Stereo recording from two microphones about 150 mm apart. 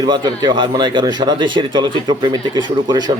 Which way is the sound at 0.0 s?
30° right (ahead or behind).